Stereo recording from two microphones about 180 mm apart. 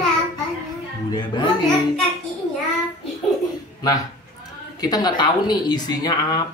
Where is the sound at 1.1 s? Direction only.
25° left (ahead or behind).